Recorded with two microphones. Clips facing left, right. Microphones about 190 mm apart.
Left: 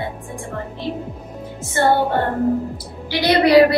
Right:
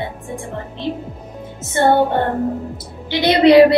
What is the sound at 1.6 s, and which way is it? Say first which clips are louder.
Speech: right 2 dB; 20° right (ahead or behind).